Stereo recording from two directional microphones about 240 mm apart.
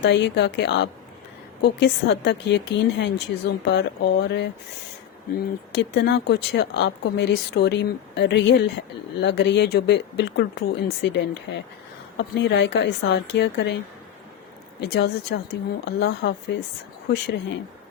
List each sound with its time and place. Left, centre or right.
0.0 s speech: left
5.7 s speech: left
14.8 s speech: left